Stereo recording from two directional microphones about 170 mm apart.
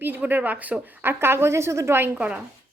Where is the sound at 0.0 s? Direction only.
10° right (ahead or behind).